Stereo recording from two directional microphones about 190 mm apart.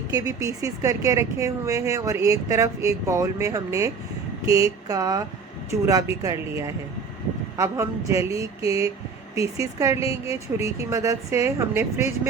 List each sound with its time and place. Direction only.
0.1 s speech: 20° right (ahead or behind)